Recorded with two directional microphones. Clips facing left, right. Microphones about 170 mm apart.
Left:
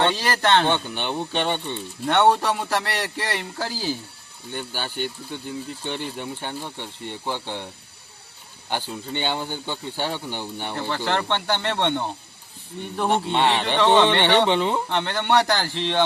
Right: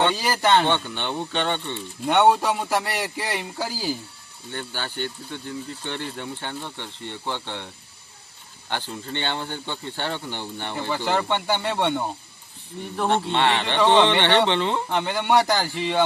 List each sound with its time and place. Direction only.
0.0 s speech: 5° right (ahead or behind)
0.7 s speech: 15° left (ahead or behind)
2.0 s speech: 15° right (ahead or behind)
2.3 s speech: centre (ahead or behind)
2.6 s speech: 15° right (ahead or behind)
4.5 s speech: 15° left (ahead or behind)
8.7 s speech: 10° left (ahead or behind)
10.8 s speech: 10° right (ahead or behind)
13.3 s speech: 15° left (ahead or behind)
13.7 s speech: 10° right (ahead or behind)
14.2 s speech: 10° left (ahead or behind)
14.8 s speech: 10° right (ahead or behind)